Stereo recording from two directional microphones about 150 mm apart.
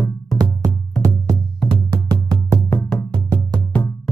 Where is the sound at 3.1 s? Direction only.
35° right (ahead or behind).